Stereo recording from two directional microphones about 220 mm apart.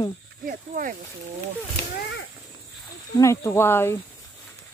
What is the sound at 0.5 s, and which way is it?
Snake, 40° right (ahead or behind).